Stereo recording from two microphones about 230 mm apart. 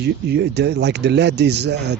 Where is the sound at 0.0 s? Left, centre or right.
Right.